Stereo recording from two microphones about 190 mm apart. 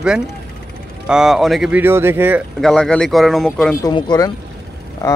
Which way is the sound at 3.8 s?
20° left (ahead or behind).